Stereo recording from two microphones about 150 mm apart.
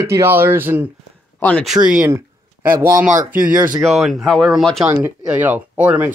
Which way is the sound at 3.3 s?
65° right (ahead or behind).